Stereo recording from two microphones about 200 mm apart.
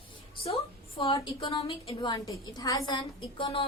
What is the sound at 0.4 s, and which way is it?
A woman's voice, 30° left (ahead or behind).